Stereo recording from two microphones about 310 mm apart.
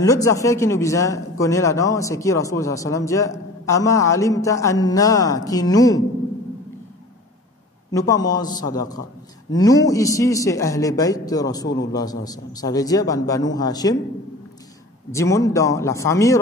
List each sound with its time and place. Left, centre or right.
0.0 s a man's voice: centre
8.1 s a man's voice: centre
11.6 s a man's voice: left
11.9 s a man's voice: centre
15.0 s a man's voice: centre